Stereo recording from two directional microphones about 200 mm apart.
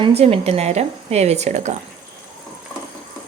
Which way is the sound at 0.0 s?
30° right (ahead or behind).